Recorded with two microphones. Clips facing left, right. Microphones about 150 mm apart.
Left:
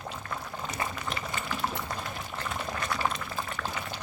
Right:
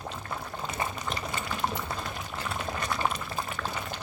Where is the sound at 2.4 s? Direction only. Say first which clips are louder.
Right 1 dB; 5° right (ahead or behind).